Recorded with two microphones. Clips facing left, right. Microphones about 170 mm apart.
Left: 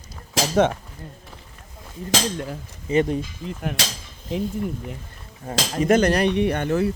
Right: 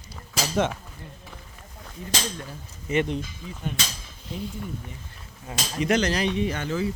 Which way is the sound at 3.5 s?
75° left (ahead or behind).